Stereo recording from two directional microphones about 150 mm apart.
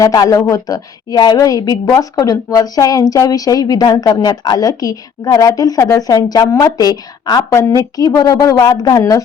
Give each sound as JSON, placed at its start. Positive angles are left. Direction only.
{"t": 0.0, "sound": "a woman's voice", "side_deg": 25}